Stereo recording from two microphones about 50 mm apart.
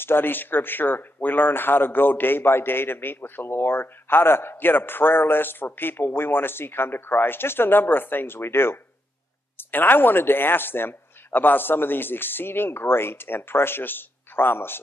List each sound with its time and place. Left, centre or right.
0.0 s speech: left
9.6 s speech: left